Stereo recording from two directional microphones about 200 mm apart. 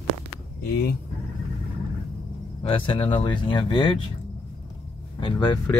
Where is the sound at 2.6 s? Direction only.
25° left (ahead or behind).